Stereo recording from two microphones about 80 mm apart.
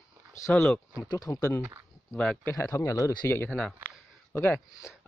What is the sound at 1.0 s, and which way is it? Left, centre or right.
Speech, left.